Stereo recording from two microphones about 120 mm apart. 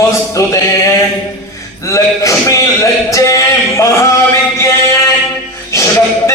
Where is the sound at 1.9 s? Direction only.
25° left (ahead or behind).